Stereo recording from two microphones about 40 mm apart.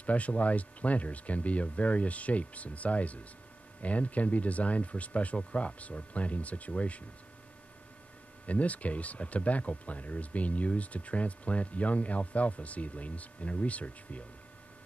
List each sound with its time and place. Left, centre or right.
0.0 s speech: left
8.5 s speech: left